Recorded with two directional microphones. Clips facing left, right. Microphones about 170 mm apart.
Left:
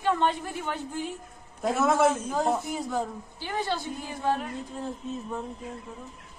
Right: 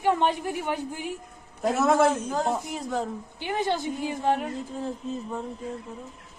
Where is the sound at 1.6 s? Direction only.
Centre (ahead or behind).